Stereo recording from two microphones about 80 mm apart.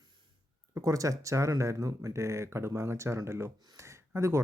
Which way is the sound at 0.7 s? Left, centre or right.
Right.